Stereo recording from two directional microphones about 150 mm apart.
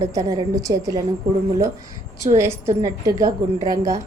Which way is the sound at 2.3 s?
20° right (ahead or behind).